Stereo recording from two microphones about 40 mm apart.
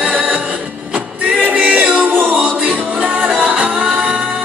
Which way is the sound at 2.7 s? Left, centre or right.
Right.